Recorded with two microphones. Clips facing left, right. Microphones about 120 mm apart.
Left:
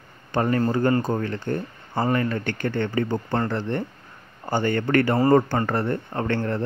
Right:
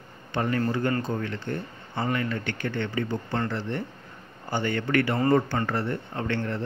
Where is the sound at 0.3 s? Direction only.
40° left (ahead or behind).